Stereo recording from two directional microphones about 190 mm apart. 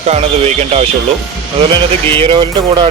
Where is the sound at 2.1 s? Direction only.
25° right (ahead or behind).